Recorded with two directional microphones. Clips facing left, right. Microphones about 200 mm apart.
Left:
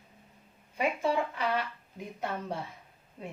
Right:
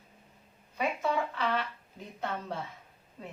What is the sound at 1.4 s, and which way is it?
A woman's voice, 10° left (ahead or behind).